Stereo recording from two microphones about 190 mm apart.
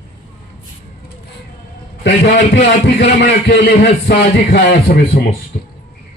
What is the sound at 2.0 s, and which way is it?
A man's voice, 70° left (ahead or behind).